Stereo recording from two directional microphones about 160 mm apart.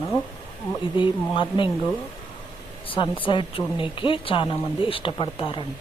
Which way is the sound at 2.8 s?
35° left (ahead or behind).